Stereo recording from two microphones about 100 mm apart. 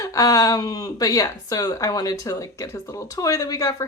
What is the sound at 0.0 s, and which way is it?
Speech, 35° left (ahead or behind).